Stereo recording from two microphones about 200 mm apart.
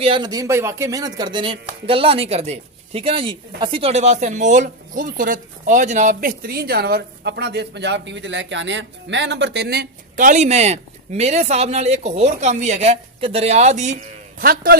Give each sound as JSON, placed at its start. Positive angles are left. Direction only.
{"t": 0.0, "sound": "speech", "side_deg": -25}
{"t": 14.4, "sound": "a man's voice", "side_deg": -50}